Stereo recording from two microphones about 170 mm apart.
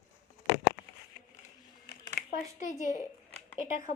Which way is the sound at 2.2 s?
70° left (ahead or behind).